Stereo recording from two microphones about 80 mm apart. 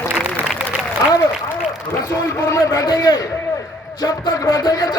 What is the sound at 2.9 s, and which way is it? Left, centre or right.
A man's voice, left.